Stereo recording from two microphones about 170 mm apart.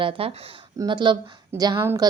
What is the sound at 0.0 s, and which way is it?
A woman's voice, 35° right (ahead or behind).